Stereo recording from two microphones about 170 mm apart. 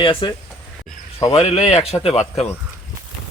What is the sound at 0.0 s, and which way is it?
Speech, 30° left (ahead or behind).